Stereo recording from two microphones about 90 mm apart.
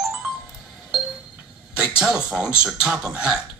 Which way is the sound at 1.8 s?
10° right (ahead or behind).